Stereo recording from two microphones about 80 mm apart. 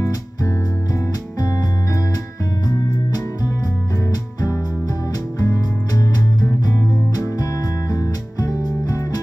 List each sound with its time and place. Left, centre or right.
5.4 s music: left
7.9 s music: left